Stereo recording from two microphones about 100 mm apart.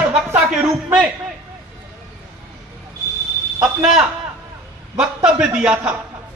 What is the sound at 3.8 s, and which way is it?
Speech, 5° right (ahead or behind).